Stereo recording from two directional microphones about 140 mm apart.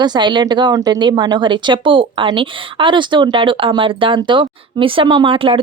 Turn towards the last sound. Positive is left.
turn(degrees=-40)  # may be behind; listen again after turning